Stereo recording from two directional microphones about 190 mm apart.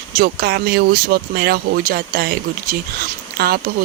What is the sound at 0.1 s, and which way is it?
Speech, 55° right (ahead or behind).